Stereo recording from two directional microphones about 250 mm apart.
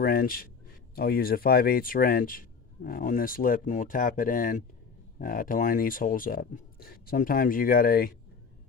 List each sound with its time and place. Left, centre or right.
0.0 s speech: left